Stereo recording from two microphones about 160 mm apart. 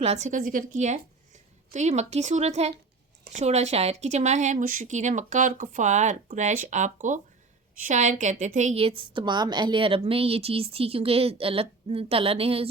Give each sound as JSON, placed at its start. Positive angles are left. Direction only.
{"t": 0.0, "sound": "a woman's voice", "side_deg": -45}